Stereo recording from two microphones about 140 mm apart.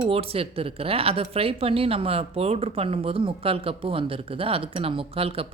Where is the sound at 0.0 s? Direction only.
45° right (ahead or behind).